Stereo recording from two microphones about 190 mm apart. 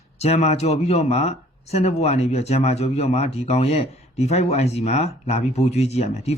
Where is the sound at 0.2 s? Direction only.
35° left (ahead or behind).